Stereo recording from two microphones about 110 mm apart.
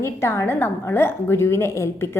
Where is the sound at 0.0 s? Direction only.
25° left (ahead or behind).